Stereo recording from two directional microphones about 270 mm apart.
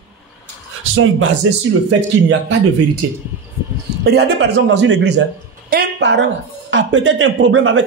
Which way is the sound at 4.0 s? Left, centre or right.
Right.